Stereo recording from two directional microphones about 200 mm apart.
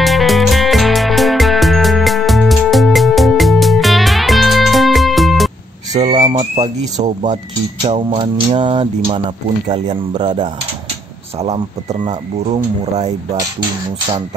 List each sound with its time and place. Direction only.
0.0 s music: centre (ahead or behind)
5.9 s a sound: 35° right (ahead or behind)
6.2 s speech: 30° right (ahead or behind)